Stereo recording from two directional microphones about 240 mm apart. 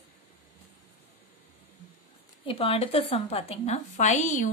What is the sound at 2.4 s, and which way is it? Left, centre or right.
A woman's voice, left.